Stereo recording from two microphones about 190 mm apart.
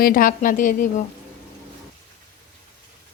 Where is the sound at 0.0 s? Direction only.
50° left (ahead or behind).